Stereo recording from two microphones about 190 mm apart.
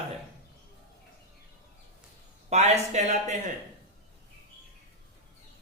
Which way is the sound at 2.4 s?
35° right (ahead or behind).